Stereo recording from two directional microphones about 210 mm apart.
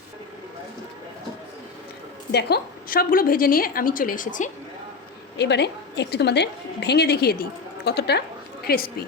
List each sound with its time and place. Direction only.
2.3 s a woman's voice: 45° left (ahead or behind)
5.4 s a woman's voice: 55° left (ahead or behind)